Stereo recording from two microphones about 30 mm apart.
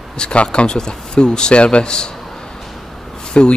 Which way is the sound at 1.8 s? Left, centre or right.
Left.